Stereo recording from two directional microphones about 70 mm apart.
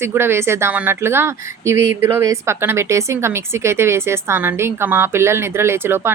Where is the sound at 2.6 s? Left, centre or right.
Right.